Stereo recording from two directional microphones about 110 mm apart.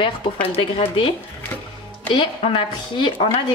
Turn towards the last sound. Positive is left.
turn(degrees=45)  # may be behind; listen again after turning